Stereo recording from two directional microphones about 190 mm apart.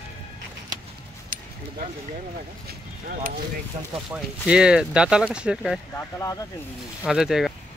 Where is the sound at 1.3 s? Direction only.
45° right (ahead or behind).